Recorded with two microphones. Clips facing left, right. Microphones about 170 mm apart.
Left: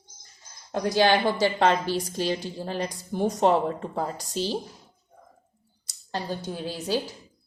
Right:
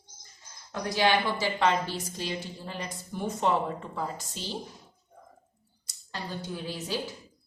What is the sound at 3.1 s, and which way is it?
Speech, 35° left (ahead or behind).